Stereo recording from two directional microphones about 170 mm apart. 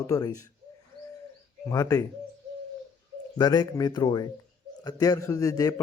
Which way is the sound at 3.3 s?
25° left (ahead or behind).